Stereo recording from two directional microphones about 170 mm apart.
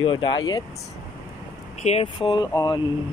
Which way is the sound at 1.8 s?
35° left (ahead or behind).